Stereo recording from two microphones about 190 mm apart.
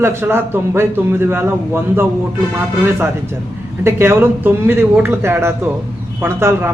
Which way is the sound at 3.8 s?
10° right (ahead or behind).